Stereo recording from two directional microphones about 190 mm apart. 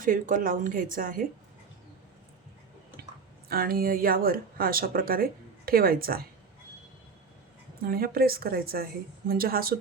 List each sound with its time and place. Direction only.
0.0 s speech: 45° right (ahead or behind)
3.5 s speech: 50° right (ahead or behind)
7.9 s speech: 50° right (ahead or behind)